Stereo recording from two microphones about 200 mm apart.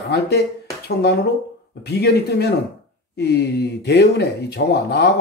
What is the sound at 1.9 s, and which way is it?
Speech, 55° left (ahead or behind).